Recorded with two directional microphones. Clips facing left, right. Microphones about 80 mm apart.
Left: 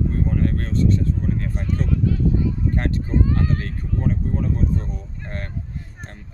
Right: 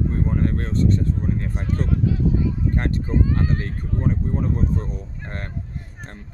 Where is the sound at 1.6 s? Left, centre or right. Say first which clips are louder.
Even; right.